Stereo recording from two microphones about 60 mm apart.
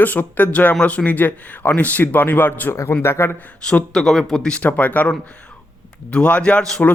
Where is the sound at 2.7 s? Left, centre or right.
Left.